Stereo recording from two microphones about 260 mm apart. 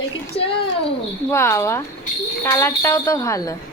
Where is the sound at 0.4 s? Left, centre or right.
Left.